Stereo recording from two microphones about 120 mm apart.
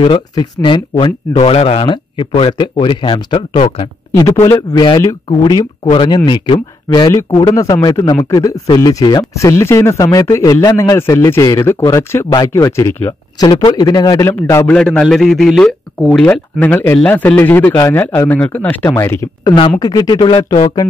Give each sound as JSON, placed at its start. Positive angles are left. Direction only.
{"t": 0.0, "sound": "speech", "side_deg": 40}
{"t": 1.4, "sound": "speech", "side_deg": 55}
{"t": 4.2, "sound": "a man's voice", "side_deg": 30}
{"t": 12.3, "sound": "speech", "side_deg": 35}
{"t": 12.7, "sound": "a man's voice", "side_deg": 20}
{"t": 13.7, "sound": "a man's voice", "side_deg": 35}
{"t": 14.7, "sound": "a man's voice", "side_deg": 5}
{"t": 16.5, "sound": "speech", "side_deg": 15}
{"t": 19.4, "sound": "speech", "side_deg": 40}